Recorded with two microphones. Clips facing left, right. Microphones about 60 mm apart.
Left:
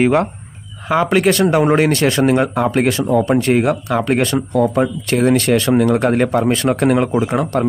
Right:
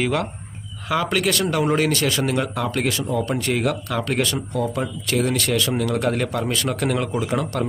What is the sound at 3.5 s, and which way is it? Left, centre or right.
Speech, left.